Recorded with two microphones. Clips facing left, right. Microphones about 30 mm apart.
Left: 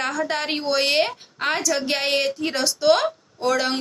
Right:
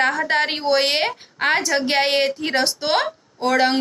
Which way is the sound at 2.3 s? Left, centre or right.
Right.